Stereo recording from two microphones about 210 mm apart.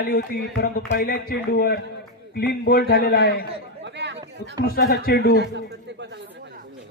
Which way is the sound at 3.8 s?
55° right (ahead or behind).